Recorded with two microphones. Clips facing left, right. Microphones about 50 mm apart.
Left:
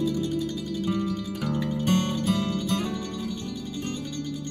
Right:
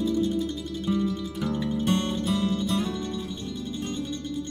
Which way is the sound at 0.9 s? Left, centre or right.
Left.